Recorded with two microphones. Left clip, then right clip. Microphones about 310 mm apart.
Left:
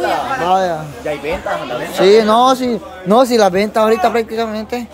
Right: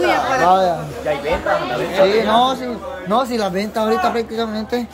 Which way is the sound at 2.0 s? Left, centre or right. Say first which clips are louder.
Left 4 dB; centre.